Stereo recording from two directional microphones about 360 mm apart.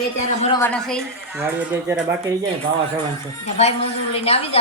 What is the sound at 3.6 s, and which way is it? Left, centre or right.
A woman's voice, centre.